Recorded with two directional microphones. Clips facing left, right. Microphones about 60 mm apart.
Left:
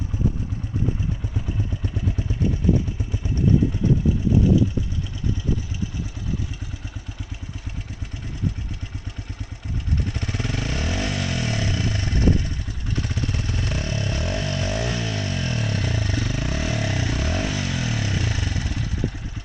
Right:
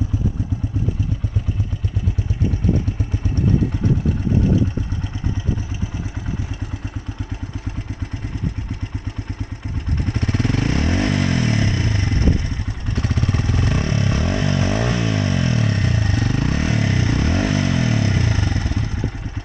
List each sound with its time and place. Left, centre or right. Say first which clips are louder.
10.1 s motorcycle: right 7 dB; right
13.0 s motorcycle: right 7 dB; right
14.3 s vehicle: right 5 dB; right